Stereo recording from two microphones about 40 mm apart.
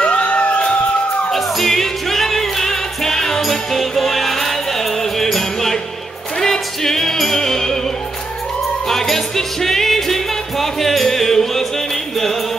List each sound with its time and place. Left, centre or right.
0.0 s a sound: left
1.3 s music: centre
8.8 s music: centre